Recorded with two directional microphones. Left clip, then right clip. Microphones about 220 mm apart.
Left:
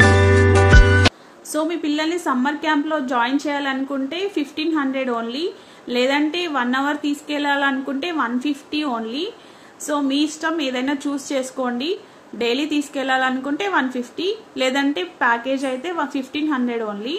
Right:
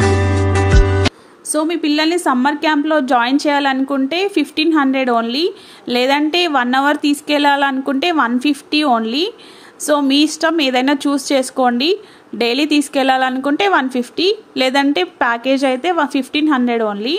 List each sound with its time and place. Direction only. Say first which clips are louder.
0.0 s music: left 2 dB; centre (ahead or behind)
1.5 s a woman's voice: right 5 dB; 35° right (ahead or behind)